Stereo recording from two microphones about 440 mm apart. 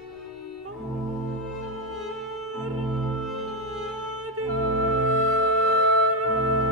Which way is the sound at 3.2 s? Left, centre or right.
Right.